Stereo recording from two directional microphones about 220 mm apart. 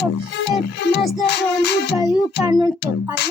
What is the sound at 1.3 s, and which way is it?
Music, 50° left (ahead or behind).